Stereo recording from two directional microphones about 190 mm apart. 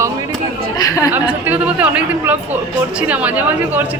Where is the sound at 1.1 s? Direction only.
10° right (ahead or behind).